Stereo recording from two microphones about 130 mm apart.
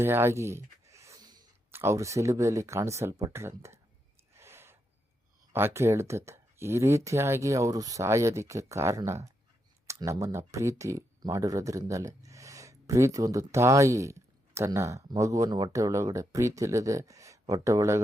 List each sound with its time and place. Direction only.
0.0 s a sound: 20° right (ahead or behind)
1.7 s speech: 20° right (ahead or behind)
4.4 s gasp: 20° right (ahead or behind)
5.5 s speech: 20° right (ahead or behind)